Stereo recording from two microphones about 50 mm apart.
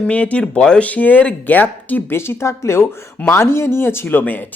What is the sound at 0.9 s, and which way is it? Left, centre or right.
Speech, left.